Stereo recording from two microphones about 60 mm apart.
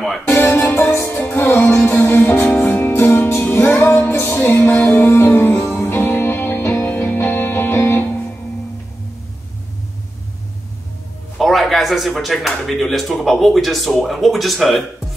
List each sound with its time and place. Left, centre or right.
0.3 s music: left
3.7 s music: left
11.3 s music: centre
12.2 s speech: centre